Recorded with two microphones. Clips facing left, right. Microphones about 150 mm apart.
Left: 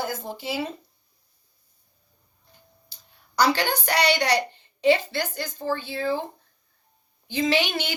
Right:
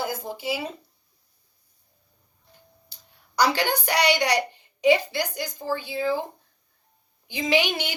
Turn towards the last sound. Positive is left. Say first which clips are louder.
# even
turn(degrees=-15)  # may be behind; listen again after turning